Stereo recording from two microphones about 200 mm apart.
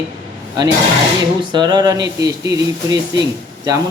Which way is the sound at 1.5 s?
20° right (ahead or behind).